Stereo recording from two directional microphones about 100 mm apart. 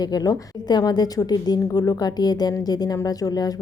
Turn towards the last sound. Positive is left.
turn(degrees=40)  # may be behind; listen again after turning